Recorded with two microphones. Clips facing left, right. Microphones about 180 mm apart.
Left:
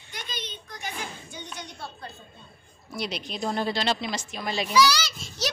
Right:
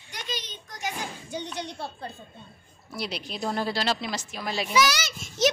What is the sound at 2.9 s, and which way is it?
A woman's voice, 5° right (ahead or behind).